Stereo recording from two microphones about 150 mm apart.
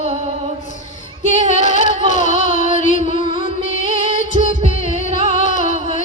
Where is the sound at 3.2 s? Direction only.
35° right (ahead or behind).